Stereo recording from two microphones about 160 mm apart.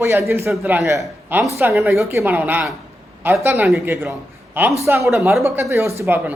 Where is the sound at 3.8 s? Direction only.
15° right (ahead or behind).